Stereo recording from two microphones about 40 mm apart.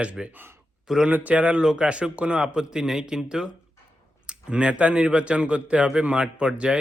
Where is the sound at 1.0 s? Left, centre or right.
Right.